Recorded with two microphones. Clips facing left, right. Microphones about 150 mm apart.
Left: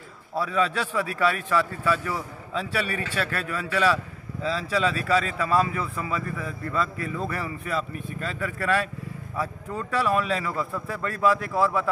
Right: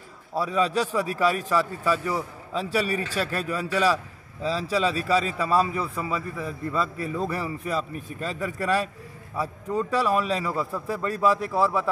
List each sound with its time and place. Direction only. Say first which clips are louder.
0.5 s a man's voice: right 2 dB; 35° right (ahead or behind)
1.9 s a man's voice: right 1 dB; 15° right (ahead or behind)
2.5 s a man's voice: right 3 dB; 35° right (ahead or behind)
5.0 s a man's voice: even; 10° right (ahead or behind)
5.5 s a man's voice: even; 35° right (ahead or behind)
6.3 s a man's voice: right 1 dB; 10° right (ahead or behind)
7.2 s a man's voice: right 3 dB; 30° right (ahead or behind)
9.3 s speech: right 3 dB; 10° right (ahead or behind)
9.8 s a man's voice: left 1 dB; 30° right (ahead or behind)
10.4 s a man's voice: right 1 dB; 10° right (ahead or behind)
11.2 s a man's voice: even; 35° right (ahead or behind)